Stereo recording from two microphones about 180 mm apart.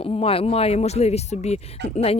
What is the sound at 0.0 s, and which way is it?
Speech, 30° left (ahead or behind).